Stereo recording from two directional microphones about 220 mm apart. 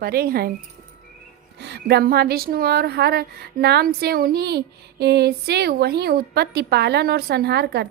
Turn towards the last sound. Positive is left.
turn(degrees=-50)  # may be behind; listen again after turning